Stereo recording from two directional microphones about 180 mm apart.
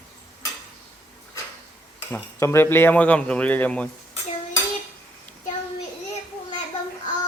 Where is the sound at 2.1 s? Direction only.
15° left (ahead or behind).